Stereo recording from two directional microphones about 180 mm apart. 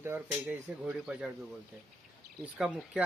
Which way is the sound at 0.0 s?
10° right (ahead or behind).